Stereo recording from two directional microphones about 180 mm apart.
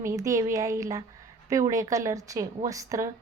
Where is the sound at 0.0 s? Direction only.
15° right (ahead or behind).